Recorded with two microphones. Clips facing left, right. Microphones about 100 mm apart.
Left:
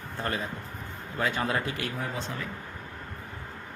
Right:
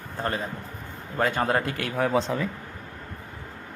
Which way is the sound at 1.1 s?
50° right (ahead or behind).